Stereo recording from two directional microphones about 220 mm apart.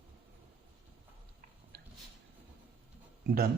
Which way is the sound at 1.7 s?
45° right (ahead or behind).